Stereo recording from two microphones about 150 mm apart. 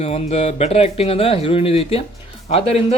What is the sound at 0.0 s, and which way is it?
Speech, 45° left (ahead or behind).